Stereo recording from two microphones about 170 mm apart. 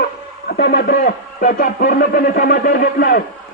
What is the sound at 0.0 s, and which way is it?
Speech, 70° left (ahead or behind).